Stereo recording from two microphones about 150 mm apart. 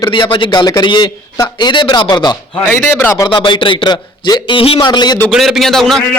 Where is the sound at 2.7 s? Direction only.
15° left (ahead or behind).